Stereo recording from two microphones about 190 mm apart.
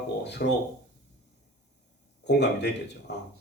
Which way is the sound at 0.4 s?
55° left (ahead or behind).